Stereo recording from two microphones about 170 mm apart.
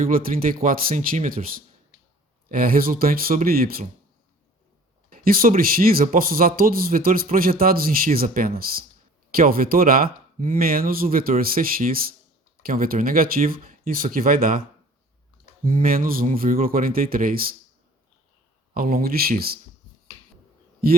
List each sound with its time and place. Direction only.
0.0 s speech: 55° right (ahead or behind)
5.0 s speech: 60° right (ahead or behind)
18.7 s speech: 60° right (ahead or behind)